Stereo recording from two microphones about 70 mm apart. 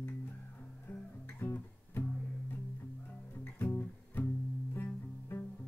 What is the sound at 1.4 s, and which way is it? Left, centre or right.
Music, left.